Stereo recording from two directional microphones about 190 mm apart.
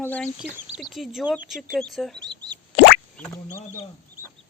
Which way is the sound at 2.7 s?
60° left (ahead or behind).